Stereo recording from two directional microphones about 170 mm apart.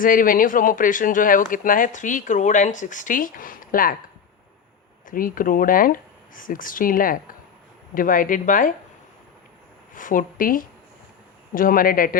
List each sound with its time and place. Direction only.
0.0 s speech: 55° left (ahead or behind)
5.0 s speech: 55° left (ahead or behind)
9.9 s speech: 50° left (ahead or behind)